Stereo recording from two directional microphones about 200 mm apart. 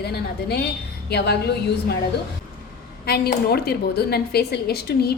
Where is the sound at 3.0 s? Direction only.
50° left (ahead or behind).